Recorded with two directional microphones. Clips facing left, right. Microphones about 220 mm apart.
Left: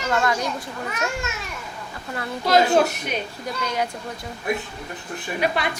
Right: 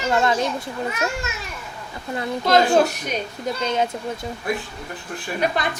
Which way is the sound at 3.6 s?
25° right (ahead or behind).